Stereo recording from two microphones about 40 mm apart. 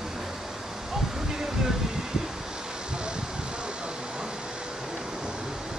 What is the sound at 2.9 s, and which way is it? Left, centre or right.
Vehicle, right.